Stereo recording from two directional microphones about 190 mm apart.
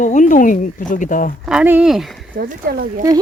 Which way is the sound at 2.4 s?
50° right (ahead or behind).